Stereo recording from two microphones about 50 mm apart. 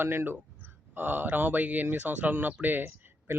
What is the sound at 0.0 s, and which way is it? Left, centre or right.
Speech, right.